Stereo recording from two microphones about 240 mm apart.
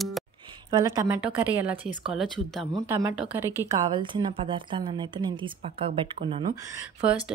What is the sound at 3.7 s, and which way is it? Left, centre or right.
A woman's voice, centre.